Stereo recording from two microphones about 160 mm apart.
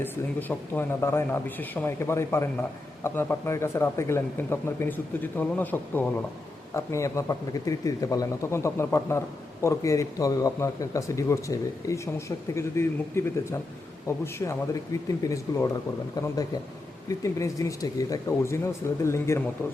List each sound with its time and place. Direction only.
0.0 s a man's voice: 10° left (ahead or behind)